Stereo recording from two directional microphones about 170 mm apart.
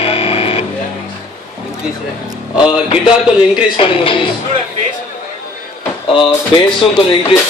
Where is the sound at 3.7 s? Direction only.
30° left (ahead or behind).